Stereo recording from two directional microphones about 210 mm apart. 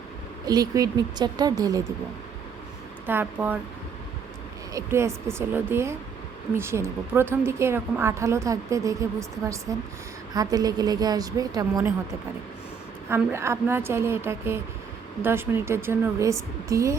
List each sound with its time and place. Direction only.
0.4 s a woman's voice: 15° right (ahead or behind)
3.1 s a woman's voice: 10° right (ahead or behind)
4.7 s a woman's voice: 15° right (ahead or behind)
13.1 s a woman's voice: 10° right (ahead or behind)